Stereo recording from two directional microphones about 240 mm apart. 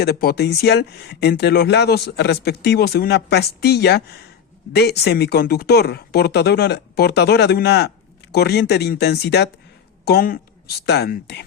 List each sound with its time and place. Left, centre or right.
0.0 s speech: left